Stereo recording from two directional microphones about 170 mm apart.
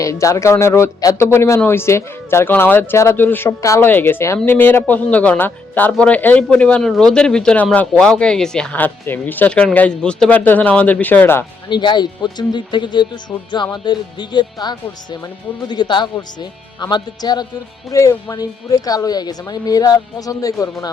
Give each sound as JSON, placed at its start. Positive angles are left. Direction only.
{"t": 0.0, "sound": "a man's voice", "side_deg": 20}
{"t": 11.7, "sound": "speech", "side_deg": 25}